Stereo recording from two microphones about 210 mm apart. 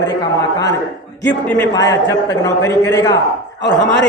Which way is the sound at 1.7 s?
15° left (ahead or behind).